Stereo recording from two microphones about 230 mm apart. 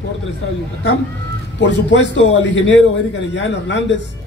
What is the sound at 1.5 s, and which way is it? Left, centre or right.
A man's voice, left.